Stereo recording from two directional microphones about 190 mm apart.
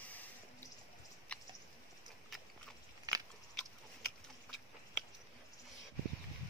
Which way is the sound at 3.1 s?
20° right (ahead or behind).